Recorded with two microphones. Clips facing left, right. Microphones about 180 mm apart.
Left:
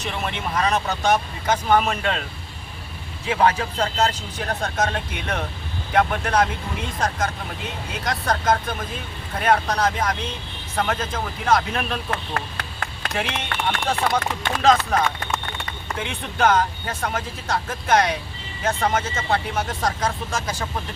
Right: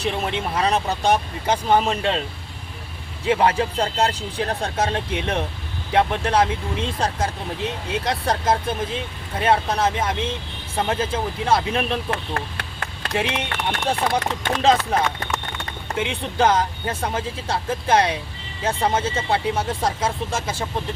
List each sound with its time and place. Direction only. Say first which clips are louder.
0.0 s speech: right 4 dB; 30° right (ahead or behind)
3.2 s speech: right 1 dB; 30° right (ahead or behind)
16.0 s speech: right 3 dB; 30° right (ahead or behind)